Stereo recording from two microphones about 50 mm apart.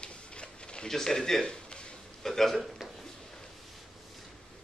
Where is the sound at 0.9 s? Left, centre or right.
Centre.